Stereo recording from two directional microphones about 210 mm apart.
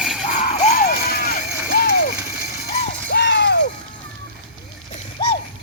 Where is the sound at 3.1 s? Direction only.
55° left (ahead or behind).